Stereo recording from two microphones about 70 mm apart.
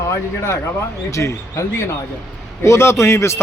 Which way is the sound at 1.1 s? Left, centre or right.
Left.